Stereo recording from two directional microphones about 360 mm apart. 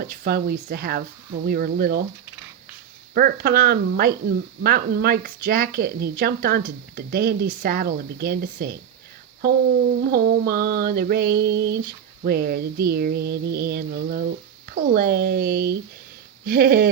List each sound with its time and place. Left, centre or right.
0.0 s mantra: right
3.2 s mantra: right
10.0 s mantra: right